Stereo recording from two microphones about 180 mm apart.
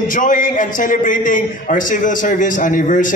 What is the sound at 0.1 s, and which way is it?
A man's voice, 45° left (ahead or behind).